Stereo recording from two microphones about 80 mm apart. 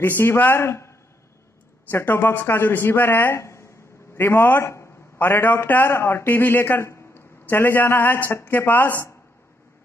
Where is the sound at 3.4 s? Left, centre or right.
Left.